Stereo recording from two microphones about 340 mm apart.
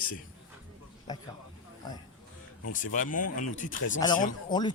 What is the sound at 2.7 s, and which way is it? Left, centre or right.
Speech, left.